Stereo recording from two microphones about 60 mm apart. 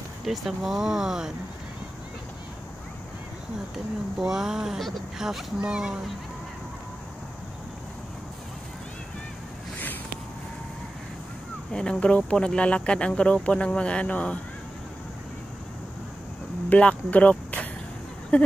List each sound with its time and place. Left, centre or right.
0.2 s speech: centre
4.2 s speech: centre
11.7 s speech: centre
16.6 s speech: left
18.3 s a sound: centre